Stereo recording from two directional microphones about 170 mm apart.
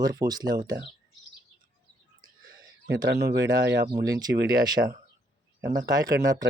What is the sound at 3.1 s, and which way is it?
Speech, 90° right.